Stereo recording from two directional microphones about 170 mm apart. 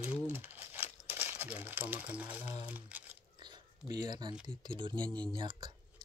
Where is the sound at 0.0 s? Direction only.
10° right (ahead or behind).